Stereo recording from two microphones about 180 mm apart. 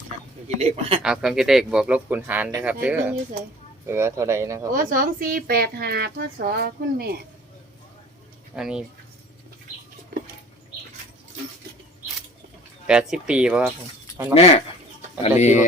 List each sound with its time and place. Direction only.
0.4 s speech: 35° right (ahead or behind)
1.0 s speech: 5° right (ahead or behind)
4.7 s a woman's voice: 50° right (ahead or behind)
8.5 s speech: 5° right (ahead or behind)
12.9 s speech: 5° right (ahead or behind)
14.3 s speech: 35° left (ahead or behind)